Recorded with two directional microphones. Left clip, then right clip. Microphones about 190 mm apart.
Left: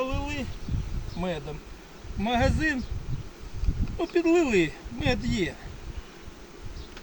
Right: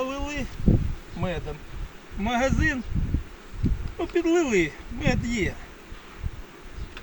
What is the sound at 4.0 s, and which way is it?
Speech, 15° left (ahead or behind).